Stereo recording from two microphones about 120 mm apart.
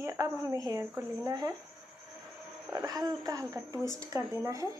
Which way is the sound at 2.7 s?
30° right (ahead or behind).